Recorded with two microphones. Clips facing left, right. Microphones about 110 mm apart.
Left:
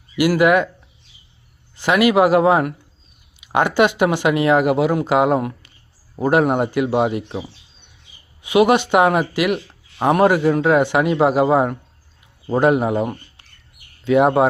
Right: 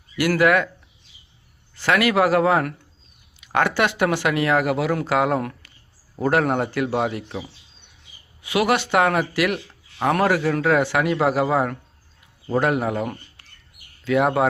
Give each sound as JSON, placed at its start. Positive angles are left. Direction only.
{"t": 0.2, "sound": "speech", "side_deg": 15}
{"t": 1.7, "sound": "speech", "side_deg": 15}